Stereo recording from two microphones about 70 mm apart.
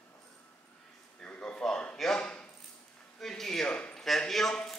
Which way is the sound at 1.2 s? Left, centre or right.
Centre.